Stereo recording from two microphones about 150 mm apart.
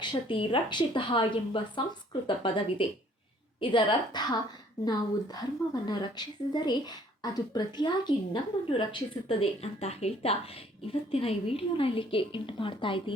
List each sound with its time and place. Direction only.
0.0 s a woman's voice: 30° left (ahead or behind)